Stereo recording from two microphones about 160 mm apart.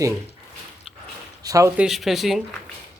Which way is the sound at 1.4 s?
20° right (ahead or behind).